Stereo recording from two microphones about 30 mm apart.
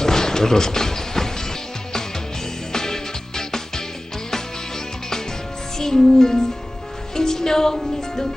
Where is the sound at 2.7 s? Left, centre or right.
Centre.